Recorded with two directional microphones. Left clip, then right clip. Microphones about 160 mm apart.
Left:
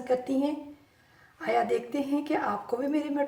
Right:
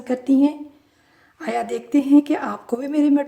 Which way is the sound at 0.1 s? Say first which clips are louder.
Right 8 dB; 55° right (ahead or behind).